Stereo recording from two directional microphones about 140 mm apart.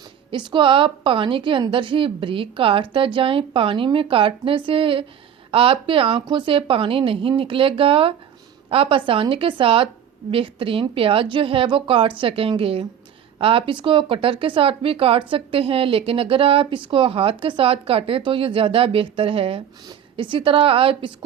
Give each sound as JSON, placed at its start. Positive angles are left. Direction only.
{"t": 0.3, "sound": "a woman's voice", "side_deg": -35}